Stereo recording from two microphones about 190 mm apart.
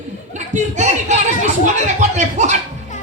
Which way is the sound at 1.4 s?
40° right (ahead or behind).